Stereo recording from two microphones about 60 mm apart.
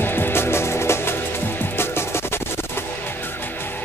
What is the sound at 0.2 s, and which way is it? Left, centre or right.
Music, left.